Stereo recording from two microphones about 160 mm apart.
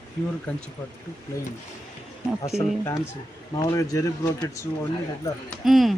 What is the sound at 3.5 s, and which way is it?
Speech, 20° left (ahead or behind).